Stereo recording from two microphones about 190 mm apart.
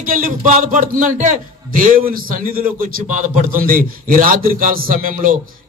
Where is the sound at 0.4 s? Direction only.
45° right (ahead or behind).